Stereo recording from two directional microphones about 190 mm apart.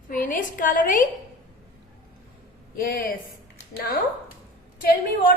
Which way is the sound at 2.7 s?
50° left (ahead or behind).